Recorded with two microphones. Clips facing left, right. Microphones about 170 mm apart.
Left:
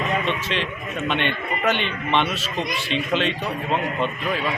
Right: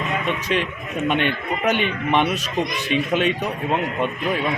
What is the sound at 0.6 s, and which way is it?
A man's voice, 10° right (ahead or behind).